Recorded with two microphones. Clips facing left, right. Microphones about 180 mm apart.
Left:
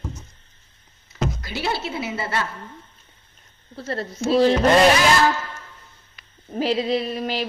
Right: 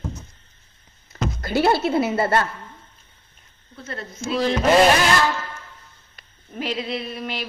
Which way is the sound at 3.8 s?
35° left (ahead or behind).